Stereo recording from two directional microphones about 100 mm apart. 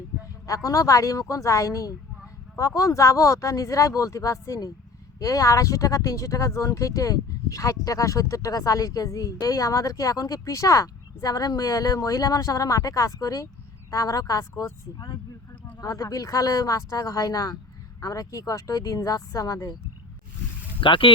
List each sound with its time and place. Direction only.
0.4 s speech: 35° left (ahead or behind)
20.8 s speech: 55° left (ahead or behind)